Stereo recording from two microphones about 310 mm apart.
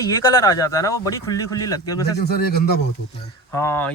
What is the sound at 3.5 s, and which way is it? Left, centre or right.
Speech, centre.